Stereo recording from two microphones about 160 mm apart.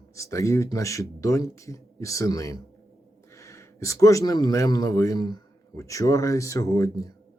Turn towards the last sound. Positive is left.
turn(degrees=20)  # may be behind; listen again after turning